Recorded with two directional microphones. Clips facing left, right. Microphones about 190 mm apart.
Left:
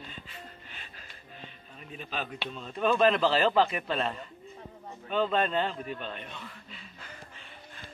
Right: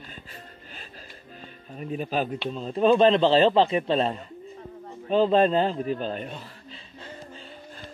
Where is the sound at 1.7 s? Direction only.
40° right (ahead or behind).